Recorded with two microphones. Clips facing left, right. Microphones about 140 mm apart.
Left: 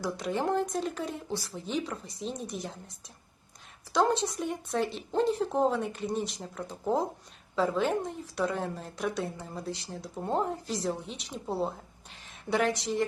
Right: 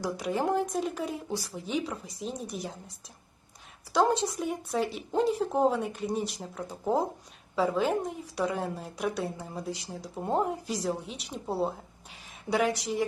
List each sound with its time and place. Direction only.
0.0 s speech: 5° right (ahead or behind)
3.9 s a woman's voice: 5° right (ahead or behind)